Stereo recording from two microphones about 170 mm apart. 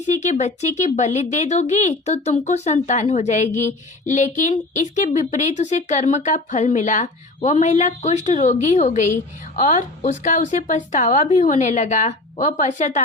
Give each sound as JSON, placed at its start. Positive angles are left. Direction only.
{"t": 0.1, "sound": "speech", "side_deg": 45}